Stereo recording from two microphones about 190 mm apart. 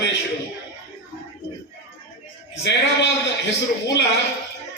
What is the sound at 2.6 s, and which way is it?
A man's voice, 65° left (ahead or behind).